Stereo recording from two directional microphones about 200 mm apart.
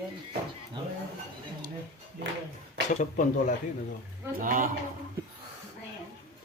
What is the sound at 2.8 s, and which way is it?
Speech, 40° left (ahead or behind).